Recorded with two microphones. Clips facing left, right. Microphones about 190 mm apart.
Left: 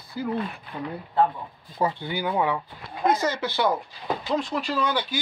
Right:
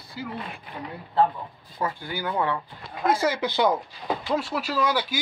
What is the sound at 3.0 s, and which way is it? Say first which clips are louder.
Speech: even; 10° right (ahead or behind).